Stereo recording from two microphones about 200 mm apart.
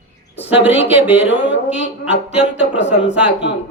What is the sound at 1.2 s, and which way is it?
Speech, 65° left (ahead or behind).